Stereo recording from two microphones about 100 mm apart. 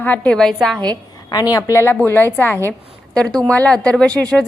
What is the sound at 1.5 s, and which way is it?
A woman's voice, 30° left (ahead or behind).